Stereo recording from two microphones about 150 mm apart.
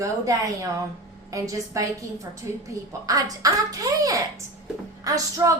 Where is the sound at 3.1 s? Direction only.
25° right (ahead or behind).